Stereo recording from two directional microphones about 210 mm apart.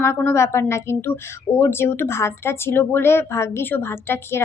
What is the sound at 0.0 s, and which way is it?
A woman's voice, 10° left (ahead or behind).